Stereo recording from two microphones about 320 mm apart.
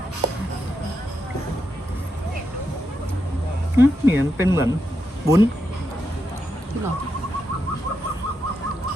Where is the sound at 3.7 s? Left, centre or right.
Centre.